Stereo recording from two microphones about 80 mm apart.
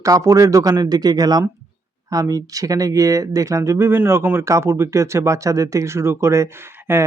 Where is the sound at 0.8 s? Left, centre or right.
Right.